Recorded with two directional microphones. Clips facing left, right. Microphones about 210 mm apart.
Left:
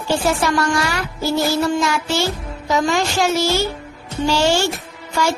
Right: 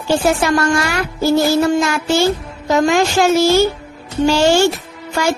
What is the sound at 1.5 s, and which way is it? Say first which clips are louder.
Speech: right 4 dB; 50° right (ahead or behind).